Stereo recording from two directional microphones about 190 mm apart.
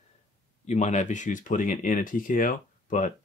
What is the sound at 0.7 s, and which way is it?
Speech, 40° left (ahead or behind).